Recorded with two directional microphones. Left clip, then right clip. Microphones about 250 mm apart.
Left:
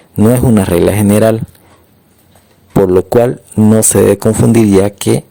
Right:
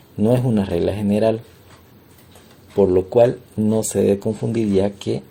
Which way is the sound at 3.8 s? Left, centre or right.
Left.